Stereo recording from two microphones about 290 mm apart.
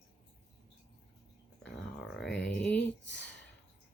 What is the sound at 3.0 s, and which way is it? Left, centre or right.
Speech, left.